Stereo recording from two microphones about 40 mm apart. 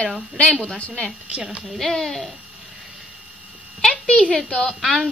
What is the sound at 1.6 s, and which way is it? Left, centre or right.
Speech, centre.